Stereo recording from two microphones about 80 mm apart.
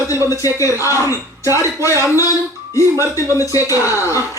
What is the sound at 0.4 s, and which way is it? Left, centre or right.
Speech, left.